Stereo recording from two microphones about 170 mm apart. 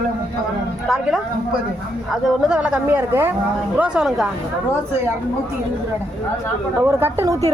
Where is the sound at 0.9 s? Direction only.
5° right (ahead or behind).